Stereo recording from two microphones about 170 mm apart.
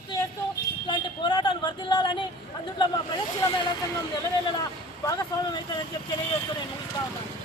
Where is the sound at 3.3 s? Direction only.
25° left (ahead or behind).